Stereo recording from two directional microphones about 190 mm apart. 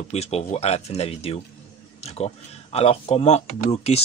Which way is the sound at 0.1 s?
35° left (ahead or behind).